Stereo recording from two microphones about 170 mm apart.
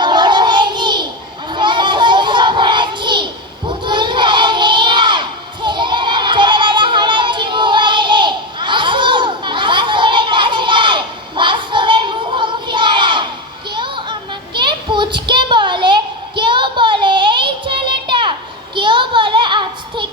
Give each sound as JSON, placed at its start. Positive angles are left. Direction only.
{"t": 0.0, "sound": "child singing", "side_deg": -25}
{"t": 3.7, "sound": "crowd", "side_deg": -25}
{"t": 5.6, "sound": "music", "side_deg": -25}
{"t": 13.7, "sound": "child singing", "side_deg": -30}